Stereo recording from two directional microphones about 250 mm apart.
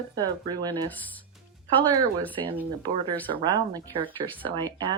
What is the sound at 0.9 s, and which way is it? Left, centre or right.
Speech, centre.